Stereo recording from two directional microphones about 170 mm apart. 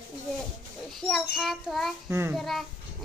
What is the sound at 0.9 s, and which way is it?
A child's voice, centre (ahead or behind).